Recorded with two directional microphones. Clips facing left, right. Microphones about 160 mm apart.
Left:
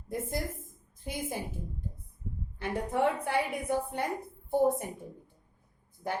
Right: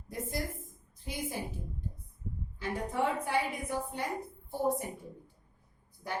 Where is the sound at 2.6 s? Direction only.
60° left (ahead or behind).